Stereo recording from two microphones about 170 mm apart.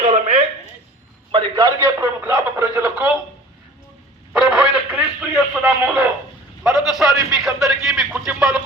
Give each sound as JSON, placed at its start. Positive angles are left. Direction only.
{"t": 0.0, "sound": "a sound", "side_deg": -40}
{"t": 1.3, "sound": "a man's voice", "side_deg": -25}
{"t": 4.3, "sound": "radio", "side_deg": -5}
{"t": 6.6, "sound": "a man's voice", "side_deg": 0}